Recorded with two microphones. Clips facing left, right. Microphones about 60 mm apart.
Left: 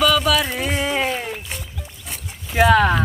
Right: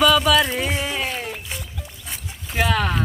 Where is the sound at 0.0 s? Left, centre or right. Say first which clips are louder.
Right 1 dB; centre.